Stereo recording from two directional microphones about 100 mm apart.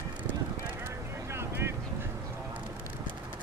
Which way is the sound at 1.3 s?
25° right (ahead or behind).